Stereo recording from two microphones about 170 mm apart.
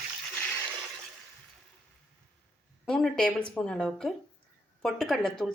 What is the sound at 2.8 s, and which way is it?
A woman's voice, 5° left (ahead or behind).